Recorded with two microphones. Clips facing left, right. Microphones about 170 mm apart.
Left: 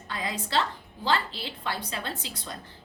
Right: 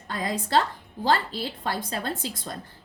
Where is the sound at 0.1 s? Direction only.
45° right (ahead or behind).